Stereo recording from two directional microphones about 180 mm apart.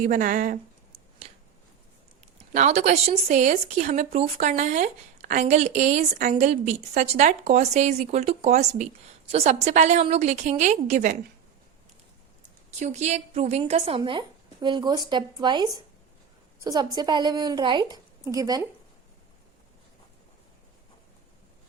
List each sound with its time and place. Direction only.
0.0 s speech: 45° right (ahead or behind)
2.5 s speech: 40° right (ahead or behind)
12.8 s a woman's voice: 40° right (ahead or behind); by 18.7 s 20° right (ahead or behind)